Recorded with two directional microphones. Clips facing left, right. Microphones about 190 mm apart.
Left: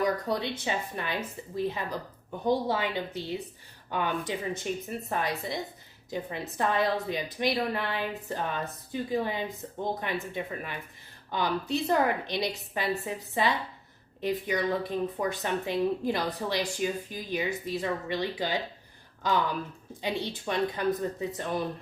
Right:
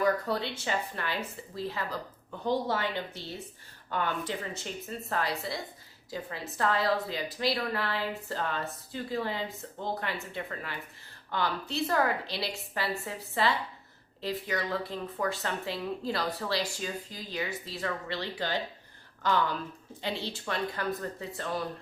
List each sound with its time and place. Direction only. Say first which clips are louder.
0.0 s a woman's voice: even; 20° left (ahead or behind)